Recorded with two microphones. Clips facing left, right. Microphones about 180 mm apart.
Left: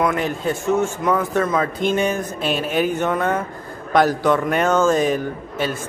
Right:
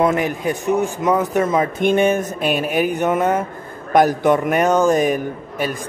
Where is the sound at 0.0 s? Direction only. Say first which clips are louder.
Right 3 dB; 15° right (ahead or behind).